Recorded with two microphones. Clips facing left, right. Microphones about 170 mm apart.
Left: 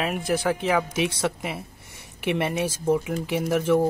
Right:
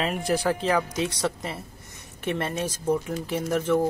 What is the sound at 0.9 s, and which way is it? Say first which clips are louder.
Speech: left 2 dB; 25° left (ahead or behind).